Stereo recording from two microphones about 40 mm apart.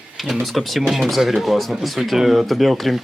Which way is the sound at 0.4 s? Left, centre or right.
Centre.